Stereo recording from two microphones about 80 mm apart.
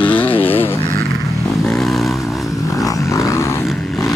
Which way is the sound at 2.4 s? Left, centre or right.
Left.